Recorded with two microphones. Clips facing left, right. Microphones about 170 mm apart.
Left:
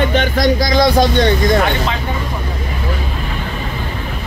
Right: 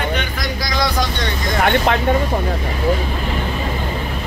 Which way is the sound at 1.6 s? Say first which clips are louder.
Right 2 dB; 60° right (ahead or behind).